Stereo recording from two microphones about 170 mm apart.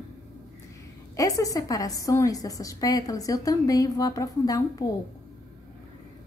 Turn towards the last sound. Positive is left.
turn(degrees=20)  # may be behind; listen again after turning